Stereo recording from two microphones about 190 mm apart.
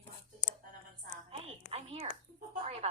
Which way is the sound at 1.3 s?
35° right (ahead or behind).